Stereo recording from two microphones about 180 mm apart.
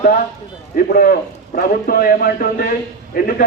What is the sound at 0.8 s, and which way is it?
A man's voice, 55° left (ahead or behind).